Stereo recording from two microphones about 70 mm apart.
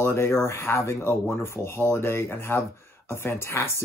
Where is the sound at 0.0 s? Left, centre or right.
Left.